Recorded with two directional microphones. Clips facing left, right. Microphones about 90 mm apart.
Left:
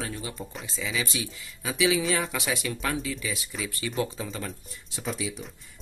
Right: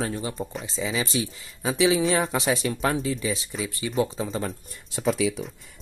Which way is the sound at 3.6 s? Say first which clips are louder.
Right 4 dB; 20° right (ahead or behind).